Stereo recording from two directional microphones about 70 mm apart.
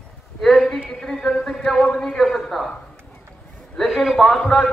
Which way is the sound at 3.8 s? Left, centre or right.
Centre.